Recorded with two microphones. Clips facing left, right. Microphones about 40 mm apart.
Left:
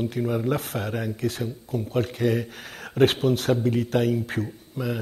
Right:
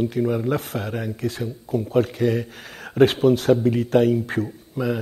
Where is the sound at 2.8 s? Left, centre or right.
Centre.